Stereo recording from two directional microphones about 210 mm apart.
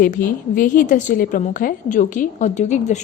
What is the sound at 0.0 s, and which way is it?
A woman's voice, 40° left (ahead or behind).